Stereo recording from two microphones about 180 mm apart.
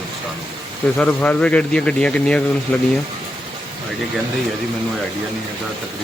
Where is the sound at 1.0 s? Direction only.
10° left (ahead or behind).